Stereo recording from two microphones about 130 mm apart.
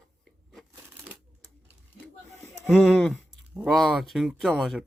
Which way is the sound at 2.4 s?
20° left (ahead or behind).